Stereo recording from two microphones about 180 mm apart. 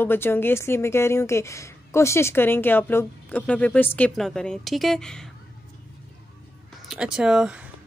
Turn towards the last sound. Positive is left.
turn(degrees=-5)  # may be behind; listen again after turning